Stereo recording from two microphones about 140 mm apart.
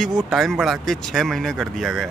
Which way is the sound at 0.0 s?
Centre (ahead or behind).